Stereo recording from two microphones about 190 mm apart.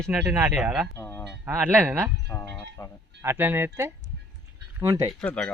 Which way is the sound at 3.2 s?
10° right (ahead or behind).